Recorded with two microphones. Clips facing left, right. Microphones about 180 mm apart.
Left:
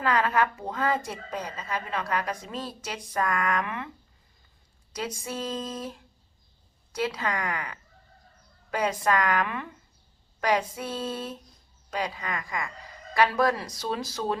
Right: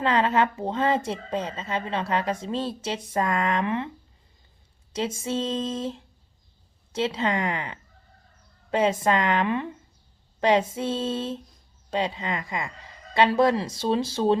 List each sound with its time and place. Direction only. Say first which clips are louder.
0.0 s a woman's voice: right 3 dB; 25° right (ahead or behind)
4.9 s a woman's voice: right 6 dB; 25° right (ahead or behind)